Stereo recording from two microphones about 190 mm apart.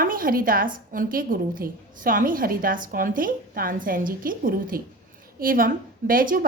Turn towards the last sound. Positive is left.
turn(degrees=-50)  # may be behind; listen again after turning